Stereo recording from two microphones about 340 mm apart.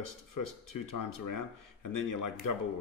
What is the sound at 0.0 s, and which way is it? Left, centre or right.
A man's voice, left.